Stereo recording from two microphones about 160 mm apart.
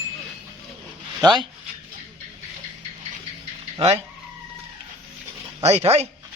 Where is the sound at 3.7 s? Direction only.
40° right (ahead or behind).